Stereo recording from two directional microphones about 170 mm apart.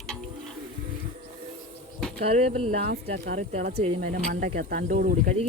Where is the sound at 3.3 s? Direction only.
45° right (ahead or behind).